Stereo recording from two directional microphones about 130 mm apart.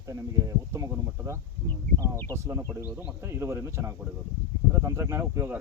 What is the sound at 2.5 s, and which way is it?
Speech, 25° right (ahead or behind).